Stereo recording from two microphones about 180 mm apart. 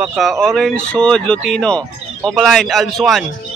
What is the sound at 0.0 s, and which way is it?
Speech, centre (ahead or behind).